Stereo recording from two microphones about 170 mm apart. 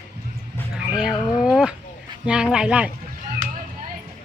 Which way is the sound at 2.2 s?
5° right (ahead or behind).